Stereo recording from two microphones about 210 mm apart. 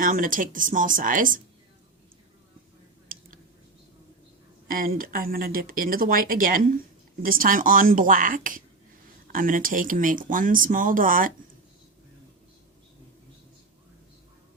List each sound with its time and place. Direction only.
0.0 s speech: 40° right (ahead or behind)
4.7 s speech: 45° right (ahead or behind)